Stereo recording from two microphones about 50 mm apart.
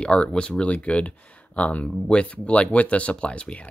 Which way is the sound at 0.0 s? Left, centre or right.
Left.